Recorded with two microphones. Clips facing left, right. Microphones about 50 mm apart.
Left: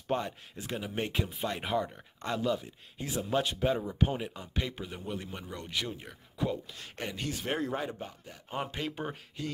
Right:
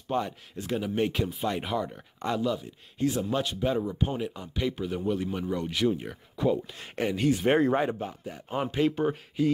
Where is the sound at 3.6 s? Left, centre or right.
Centre.